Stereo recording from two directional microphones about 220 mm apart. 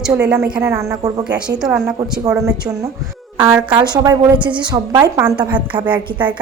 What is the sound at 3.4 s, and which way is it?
A woman's voice, 15° right (ahead or behind).